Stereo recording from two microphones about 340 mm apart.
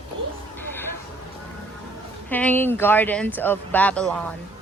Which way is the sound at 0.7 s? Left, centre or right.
Centre.